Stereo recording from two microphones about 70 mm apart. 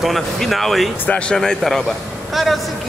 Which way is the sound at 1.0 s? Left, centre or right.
Centre.